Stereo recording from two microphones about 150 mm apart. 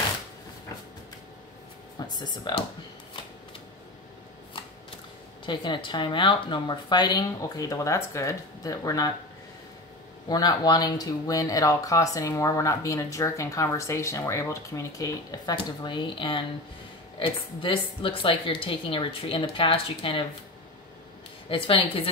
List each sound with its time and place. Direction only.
2.0 s speech: 30° left (ahead or behind)
5.4 s speech: 30° left (ahead or behind)
10.2 s a woman's voice: 25° left (ahead or behind)
21.5 s a woman's voice: 35° left (ahead or behind)